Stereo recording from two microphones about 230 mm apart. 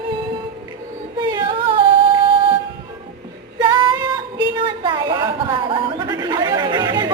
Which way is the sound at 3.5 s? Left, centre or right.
Centre.